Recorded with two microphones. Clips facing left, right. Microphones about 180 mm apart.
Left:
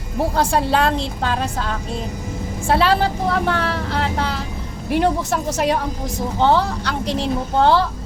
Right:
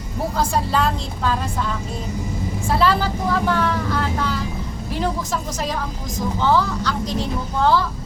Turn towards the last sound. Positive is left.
turn(degrees=70)  # may be behind; listen again after turning